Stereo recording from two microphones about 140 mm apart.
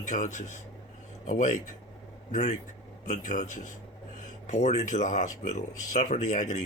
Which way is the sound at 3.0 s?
65° left (ahead or behind).